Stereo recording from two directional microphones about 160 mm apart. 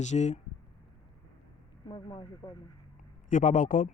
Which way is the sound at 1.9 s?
30° left (ahead or behind).